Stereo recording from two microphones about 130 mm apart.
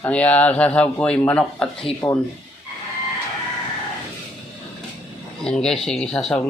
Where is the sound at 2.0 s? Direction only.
30° left (ahead or behind).